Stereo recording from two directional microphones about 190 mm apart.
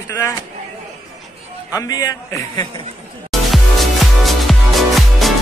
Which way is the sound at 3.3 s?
Centre (ahead or behind).